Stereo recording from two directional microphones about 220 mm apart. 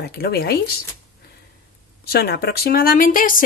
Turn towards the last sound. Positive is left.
turn(degrees=40)  # may be behind; listen again after turning